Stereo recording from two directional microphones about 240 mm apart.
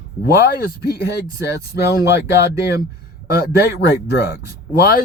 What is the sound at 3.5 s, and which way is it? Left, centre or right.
Speech, left.